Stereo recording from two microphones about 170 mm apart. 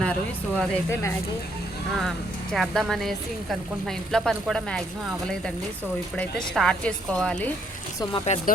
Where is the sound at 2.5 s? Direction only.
Centre (ahead or behind).